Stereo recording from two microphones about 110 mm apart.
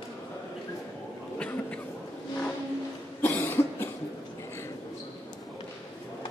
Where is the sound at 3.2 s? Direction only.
15° left (ahead or behind).